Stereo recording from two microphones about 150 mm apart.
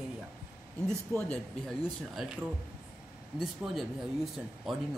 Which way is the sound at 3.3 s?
Centre (ahead or behind).